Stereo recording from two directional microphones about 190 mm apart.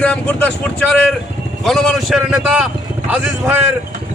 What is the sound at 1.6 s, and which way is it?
Speech, centre (ahead or behind).